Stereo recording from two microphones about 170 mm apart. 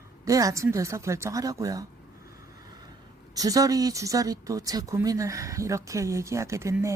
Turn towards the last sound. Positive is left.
turn(degrees=-15)  # may be behind; listen again after turning